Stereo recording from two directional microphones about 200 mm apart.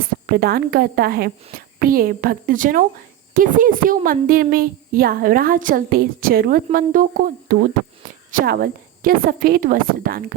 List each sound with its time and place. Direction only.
0.3 s a woman's voice: 50° right (ahead or behind)